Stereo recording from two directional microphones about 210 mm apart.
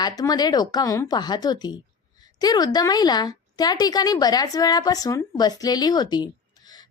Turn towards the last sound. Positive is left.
turn(degrees=20)  # may be behind; listen again after turning